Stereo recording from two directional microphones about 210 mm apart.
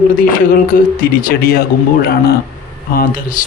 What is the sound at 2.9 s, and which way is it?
Speech, 40° left (ahead or behind).